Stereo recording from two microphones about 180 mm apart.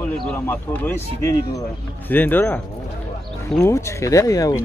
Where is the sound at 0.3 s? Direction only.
10° left (ahead or behind).